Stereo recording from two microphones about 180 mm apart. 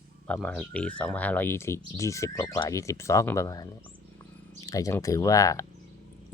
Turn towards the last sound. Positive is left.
turn(degrees=20)  # may be behind; listen again after turning